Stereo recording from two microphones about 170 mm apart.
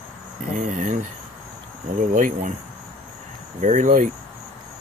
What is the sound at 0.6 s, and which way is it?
Speech, 45° right (ahead or behind).